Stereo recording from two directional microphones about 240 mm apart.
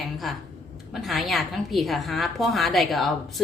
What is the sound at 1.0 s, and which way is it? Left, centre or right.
A woman's voice, centre.